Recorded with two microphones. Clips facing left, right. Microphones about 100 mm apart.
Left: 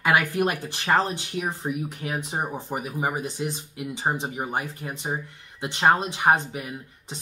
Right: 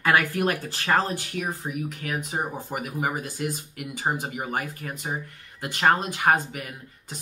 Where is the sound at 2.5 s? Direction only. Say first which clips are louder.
Left 1 dB; 20° left (ahead or behind).